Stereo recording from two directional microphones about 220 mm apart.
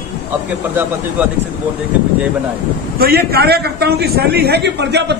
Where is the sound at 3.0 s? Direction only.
45° right (ahead or behind).